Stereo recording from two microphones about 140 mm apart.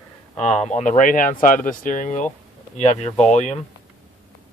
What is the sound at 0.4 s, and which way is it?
Speech, 55° left (ahead or behind).